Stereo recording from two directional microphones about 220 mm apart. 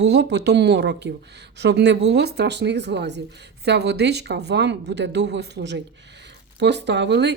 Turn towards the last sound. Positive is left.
turn(degrees=-50)  # may be behind; listen again after turning